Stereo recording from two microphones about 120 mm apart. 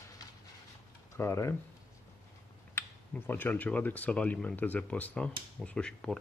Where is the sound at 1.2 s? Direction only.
20° left (ahead or behind).